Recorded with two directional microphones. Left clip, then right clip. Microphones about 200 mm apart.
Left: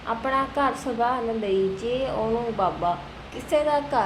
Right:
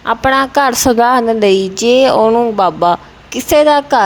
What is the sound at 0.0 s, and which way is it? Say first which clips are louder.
A woman's voice: right 13 dB; 55° right (ahead or behind).